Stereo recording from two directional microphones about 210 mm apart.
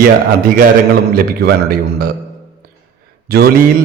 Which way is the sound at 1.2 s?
45° right (ahead or behind).